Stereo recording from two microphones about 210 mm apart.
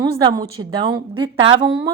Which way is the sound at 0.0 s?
20° right (ahead or behind).